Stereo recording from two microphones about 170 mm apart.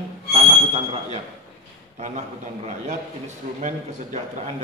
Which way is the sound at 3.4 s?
45° right (ahead or behind).